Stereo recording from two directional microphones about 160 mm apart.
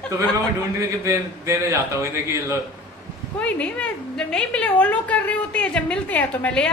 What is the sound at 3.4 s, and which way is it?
A woman's voice, 10° left (ahead or behind).